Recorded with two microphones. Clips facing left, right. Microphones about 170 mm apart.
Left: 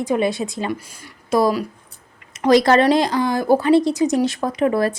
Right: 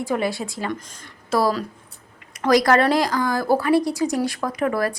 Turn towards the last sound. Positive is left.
turn(degrees=25)  # may be behind; listen again after turning